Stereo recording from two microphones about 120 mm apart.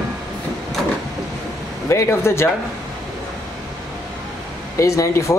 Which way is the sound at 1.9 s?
25° left (ahead or behind).